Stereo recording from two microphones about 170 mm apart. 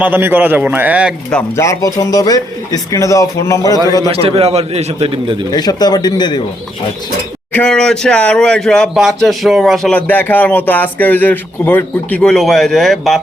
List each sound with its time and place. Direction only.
0.0 s a man's voice: 10° right (ahead or behind)
1.3 s speech: 5° left (ahead or behind)
1.6 s speech: 20° left (ahead or behind)
4.1 s a man's voice: 35° right (ahead or behind)
5.5 s speech: 25° left (ahead or behind)
7.5 s speech: 5° left (ahead or behind)